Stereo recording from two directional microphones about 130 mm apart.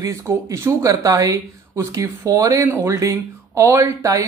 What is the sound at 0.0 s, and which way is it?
Speech, 25° right (ahead or behind).